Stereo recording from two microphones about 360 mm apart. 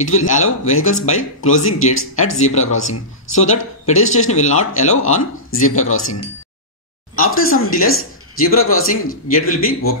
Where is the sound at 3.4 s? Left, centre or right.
Centre.